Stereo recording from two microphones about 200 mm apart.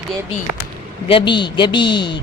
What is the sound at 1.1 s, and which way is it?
Speech, 25° left (ahead or behind).